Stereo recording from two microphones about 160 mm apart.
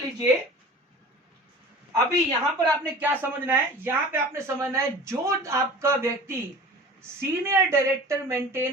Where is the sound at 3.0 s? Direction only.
10° right (ahead or behind).